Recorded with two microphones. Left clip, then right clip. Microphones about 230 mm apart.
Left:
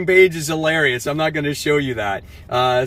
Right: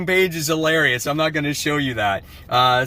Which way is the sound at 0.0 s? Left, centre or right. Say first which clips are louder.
Left 5 dB; centre.